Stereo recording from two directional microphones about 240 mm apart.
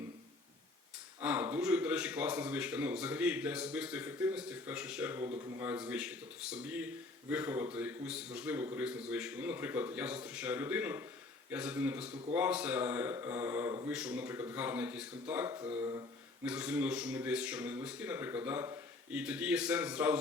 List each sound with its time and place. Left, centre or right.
1.2 s speech: centre
16.4 s speech: centre